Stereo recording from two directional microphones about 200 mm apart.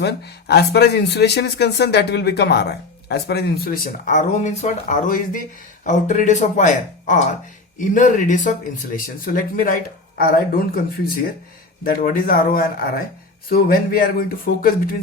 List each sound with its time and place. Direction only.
0.0 s speech: 55° left (ahead or behind)
11.8 s speech: 45° left (ahead or behind)